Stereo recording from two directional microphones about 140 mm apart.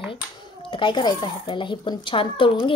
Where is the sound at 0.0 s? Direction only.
40° left (ahead or behind).